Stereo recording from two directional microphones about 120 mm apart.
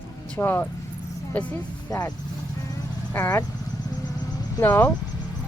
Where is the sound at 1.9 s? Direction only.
30° left (ahead or behind).